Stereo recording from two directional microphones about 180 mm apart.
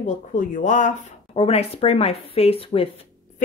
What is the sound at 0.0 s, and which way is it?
Speech, 45° left (ahead or behind).